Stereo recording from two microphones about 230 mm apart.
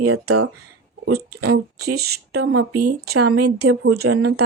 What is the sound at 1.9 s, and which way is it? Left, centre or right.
Speech, right.